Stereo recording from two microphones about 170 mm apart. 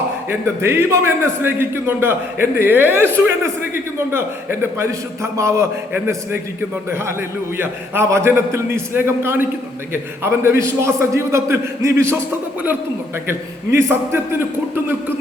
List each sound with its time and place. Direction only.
0.6 s a man's voice: 15° right (ahead or behind)
13.2 s a man's voice: 15° right (ahead or behind)